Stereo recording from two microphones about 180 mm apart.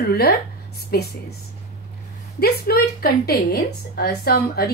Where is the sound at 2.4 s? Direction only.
60° left (ahead or behind).